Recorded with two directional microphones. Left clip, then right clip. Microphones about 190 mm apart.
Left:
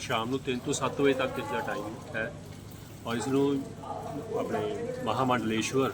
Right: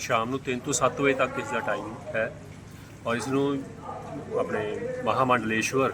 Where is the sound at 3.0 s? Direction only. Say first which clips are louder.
Right 2 dB; 15° right (ahead or behind).